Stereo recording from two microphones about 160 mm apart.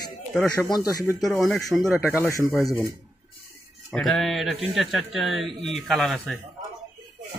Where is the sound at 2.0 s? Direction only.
15° left (ahead or behind).